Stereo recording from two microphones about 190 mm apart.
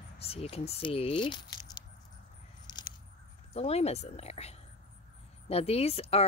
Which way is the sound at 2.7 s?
20° left (ahead or behind).